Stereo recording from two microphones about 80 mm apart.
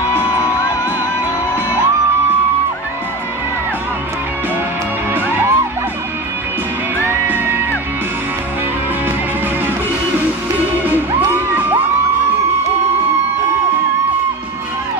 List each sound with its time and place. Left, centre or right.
5.1 s music: right
7.0 s music: right
10.8 s music: right